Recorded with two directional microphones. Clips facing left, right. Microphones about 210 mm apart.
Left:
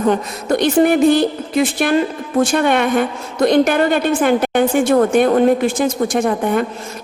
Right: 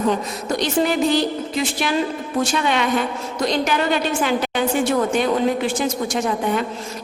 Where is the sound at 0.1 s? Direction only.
55° left (ahead or behind).